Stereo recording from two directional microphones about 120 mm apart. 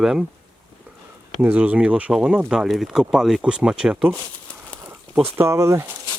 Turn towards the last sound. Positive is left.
turn(degrees=-25)  # may be behind; listen again after turning